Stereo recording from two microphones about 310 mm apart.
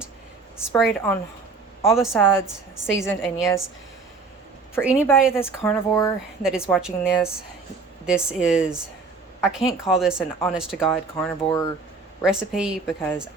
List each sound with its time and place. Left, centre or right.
0.5 s a woman's voice: centre
4.8 s speech: centre
5.0 s speech: centre